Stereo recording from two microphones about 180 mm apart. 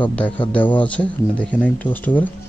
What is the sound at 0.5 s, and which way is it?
Speech, 10° left (ahead or behind).